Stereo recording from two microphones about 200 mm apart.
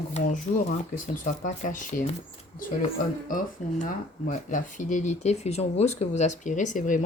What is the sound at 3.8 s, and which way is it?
Speech, 40° left (ahead or behind).